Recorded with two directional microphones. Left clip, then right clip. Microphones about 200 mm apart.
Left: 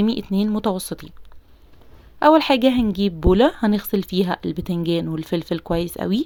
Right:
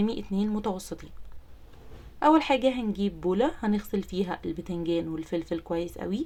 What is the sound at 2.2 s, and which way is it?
Speech, 40° left (ahead or behind).